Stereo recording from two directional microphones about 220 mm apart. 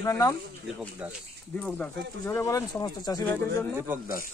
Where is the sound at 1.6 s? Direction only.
5° left (ahead or behind).